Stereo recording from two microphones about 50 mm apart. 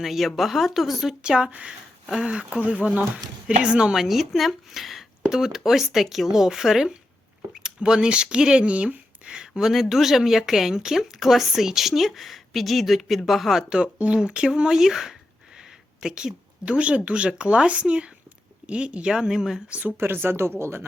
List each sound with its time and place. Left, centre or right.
0.0 s speech: centre
1.2 s speech: centre
3.9 s speech: centre
13.8 s speech: right; by 19.6 s centre
20.0 s speech: right